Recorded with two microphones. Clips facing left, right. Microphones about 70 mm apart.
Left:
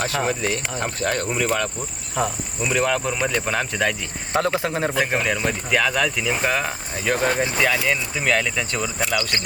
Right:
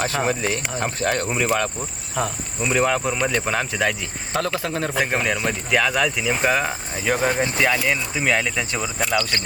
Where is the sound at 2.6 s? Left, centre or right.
Centre.